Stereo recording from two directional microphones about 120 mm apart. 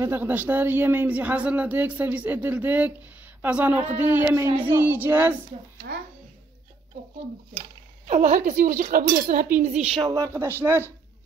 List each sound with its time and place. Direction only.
0.0 s a man's voice: 15° right (ahead or behind)
8.1 s speech: 90° right
9.6 s a woman's voice: 70° right (ahead or behind)
9.9 s speech: 35° right (ahead or behind)
10.6 s speech: 20° right (ahead or behind)